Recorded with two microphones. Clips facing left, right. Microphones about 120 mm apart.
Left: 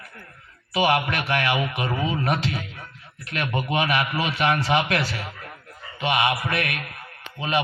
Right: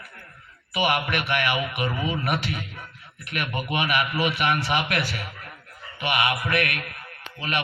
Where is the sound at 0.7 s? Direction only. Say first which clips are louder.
Left 3 dB; 30° left (ahead or behind).